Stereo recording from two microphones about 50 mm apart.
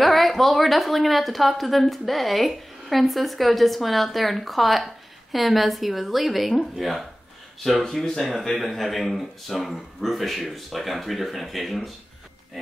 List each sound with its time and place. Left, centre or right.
0.0 s speech: centre
7.8 s speech: centre